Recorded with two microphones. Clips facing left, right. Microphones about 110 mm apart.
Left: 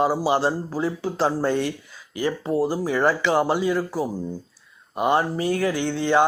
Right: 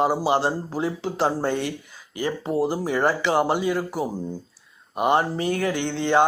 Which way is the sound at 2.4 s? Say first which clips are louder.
Even; 20° right (ahead or behind).